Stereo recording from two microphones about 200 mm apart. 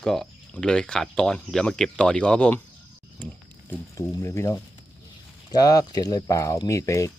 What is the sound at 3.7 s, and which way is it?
Speech, 15° left (ahead or behind).